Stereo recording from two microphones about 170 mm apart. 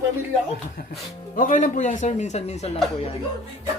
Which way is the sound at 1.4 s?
50° left (ahead or behind).